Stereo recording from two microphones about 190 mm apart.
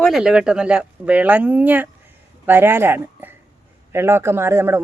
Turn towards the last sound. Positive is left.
turn(degrees=-10)  # may be behind; listen again after turning